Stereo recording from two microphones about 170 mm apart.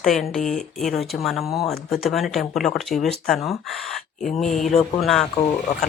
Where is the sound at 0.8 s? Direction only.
Centre (ahead or behind).